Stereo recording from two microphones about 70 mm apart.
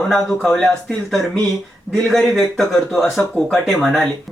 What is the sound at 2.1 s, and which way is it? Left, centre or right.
Speech, centre.